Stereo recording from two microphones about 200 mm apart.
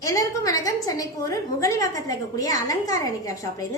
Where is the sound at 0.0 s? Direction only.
15° left (ahead or behind).